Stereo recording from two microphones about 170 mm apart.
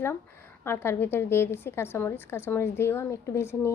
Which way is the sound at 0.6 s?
15° left (ahead or behind).